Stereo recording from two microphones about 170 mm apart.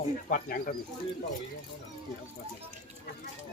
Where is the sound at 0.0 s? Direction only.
55° left (ahead or behind).